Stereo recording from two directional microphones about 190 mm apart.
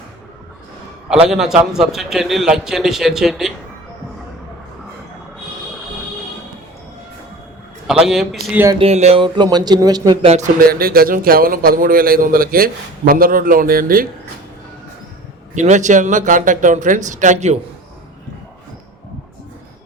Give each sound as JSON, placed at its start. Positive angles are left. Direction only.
{"t": 1.3, "sound": "a man's voice", "side_deg": 0}
{"t": 8.0, "sound": "a man's voice", "side_deg": 0}
{"t": 8.8, "sound": "speech", "side_deg": -35}
{"t": 10.6, "sound": "a man's voice", "side_deg": -50}
{"t": 15.5, "sound": "speech", "side_deg": -40}